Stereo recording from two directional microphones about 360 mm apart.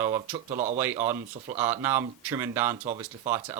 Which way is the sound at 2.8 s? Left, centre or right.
Centre.